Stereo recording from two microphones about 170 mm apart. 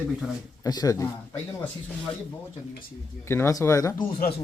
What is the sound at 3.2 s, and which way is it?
Speech, 15° left (ahead or behind).